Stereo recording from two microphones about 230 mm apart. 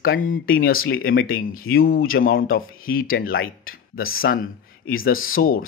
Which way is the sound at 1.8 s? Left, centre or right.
Left.